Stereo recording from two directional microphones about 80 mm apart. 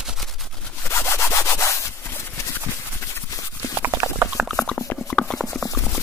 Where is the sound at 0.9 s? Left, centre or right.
Left.